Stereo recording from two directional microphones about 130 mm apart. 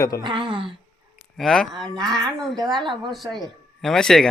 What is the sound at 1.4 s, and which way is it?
A woman's voice, centre (ahead or behind).